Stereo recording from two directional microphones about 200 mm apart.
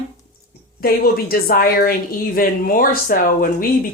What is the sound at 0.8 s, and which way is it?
A woman's voice, 50° left (ahead or behind).